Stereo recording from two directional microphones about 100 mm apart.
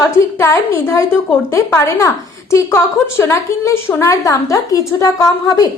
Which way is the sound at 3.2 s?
30° left (ahead or behind).